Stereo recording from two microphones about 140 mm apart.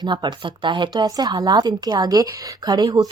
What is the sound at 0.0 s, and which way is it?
Speech, 30° right (ahead or behind).